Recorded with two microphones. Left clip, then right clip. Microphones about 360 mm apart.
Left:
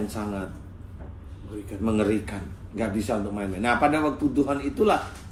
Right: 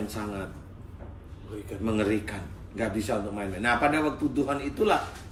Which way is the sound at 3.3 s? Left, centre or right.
Centre.